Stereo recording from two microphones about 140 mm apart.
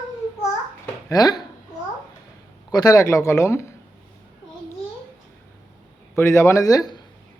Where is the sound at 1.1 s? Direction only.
25° left (ahead or behind).